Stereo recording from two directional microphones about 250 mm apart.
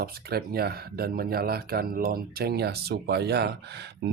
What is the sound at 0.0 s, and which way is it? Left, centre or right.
Speech, right.